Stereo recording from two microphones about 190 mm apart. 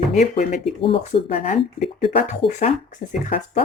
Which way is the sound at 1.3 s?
40° left (ahead or behind).